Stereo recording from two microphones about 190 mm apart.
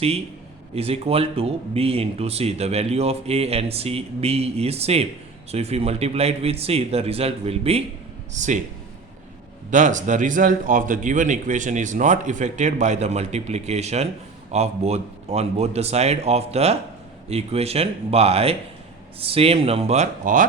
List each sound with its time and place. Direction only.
0.8 s speech: 30° right (ahead or behind)
9.6 s speech: 40° right (ahead or behind)